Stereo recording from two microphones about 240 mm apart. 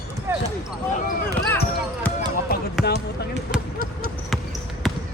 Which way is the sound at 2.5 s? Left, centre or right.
Left.